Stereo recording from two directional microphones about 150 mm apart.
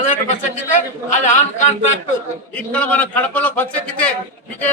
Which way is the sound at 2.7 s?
10° left (ahead or behind).